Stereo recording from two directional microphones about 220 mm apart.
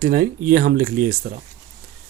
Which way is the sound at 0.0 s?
40° right (ahead or behind).